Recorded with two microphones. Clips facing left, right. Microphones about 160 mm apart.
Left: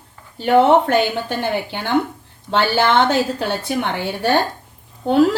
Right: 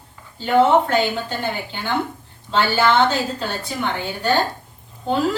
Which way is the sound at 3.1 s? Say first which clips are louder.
Left 5 dB; 70° left (ahead or behind).